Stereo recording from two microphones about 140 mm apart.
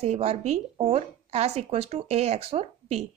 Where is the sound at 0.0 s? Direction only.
45° right (ahead or behind).